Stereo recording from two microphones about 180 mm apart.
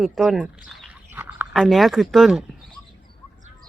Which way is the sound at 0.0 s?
Centre (ahead or behind).